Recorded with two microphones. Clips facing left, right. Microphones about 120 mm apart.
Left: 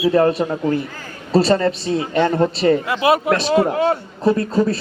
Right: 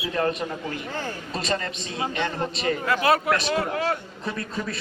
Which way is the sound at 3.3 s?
30° left (ahead or behind).